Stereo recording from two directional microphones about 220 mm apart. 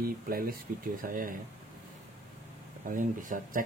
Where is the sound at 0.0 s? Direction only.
40° right (ahead or behind).